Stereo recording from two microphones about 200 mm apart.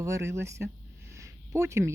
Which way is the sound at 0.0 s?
15° right (ahead or behind).